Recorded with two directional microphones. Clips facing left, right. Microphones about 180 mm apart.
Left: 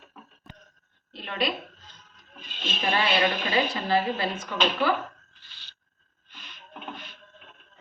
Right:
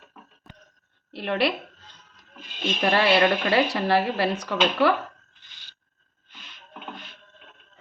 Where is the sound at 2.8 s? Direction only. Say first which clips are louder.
Right 5 dB; 65° right (ahead or behind).